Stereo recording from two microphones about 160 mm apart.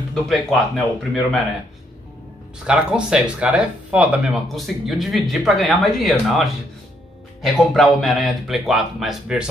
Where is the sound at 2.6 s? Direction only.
5° right (ahead or behind).